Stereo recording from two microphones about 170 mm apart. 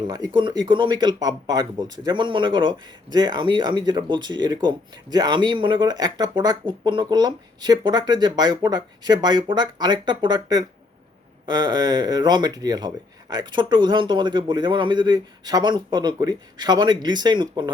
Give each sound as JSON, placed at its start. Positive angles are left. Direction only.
{"t": 0.0, "sound": "speech", "side_deg": -25}